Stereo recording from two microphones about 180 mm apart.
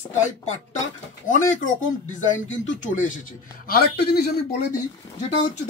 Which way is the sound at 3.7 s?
60° left (ahead or behind).